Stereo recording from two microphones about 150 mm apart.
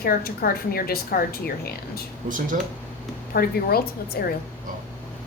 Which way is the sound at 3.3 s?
90° left.